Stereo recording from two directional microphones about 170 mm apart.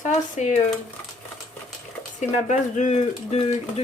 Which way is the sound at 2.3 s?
45° left (ahead or behind).